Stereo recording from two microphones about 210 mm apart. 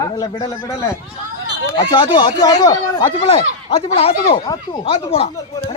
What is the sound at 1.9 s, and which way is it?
Speech, 25° left (ahead or behind).